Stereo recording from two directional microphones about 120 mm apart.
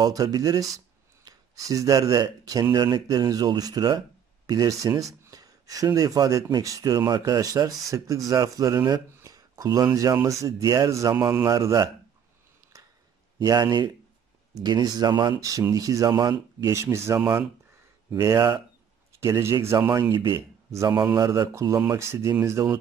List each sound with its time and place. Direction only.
0.0 s a man's voice: 30° right (ahead or behind)
12.7 s a sound: 25° right (ahead or behind)
13.4 s a man's voice: 35° right (ahead or behind)
18.2 s a man's voice: 25° right (ahead or behind)